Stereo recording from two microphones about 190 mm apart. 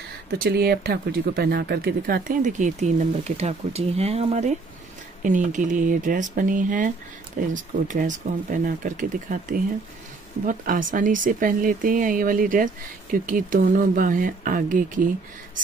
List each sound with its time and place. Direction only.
0.4 s speech: 55° right (ahead or behind)